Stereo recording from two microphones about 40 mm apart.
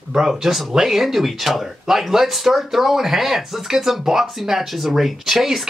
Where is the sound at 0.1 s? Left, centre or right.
Centre.